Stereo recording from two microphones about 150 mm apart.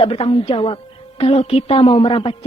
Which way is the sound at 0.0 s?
40° left (ahead or behind).